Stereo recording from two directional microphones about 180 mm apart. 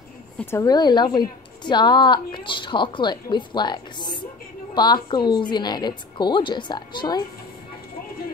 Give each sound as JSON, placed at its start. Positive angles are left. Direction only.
{"t": 0.4, "sound": "a woman's voice", "side_deg": 15}